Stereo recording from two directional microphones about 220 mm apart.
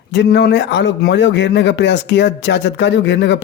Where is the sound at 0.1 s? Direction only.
50° left (ahead or behind).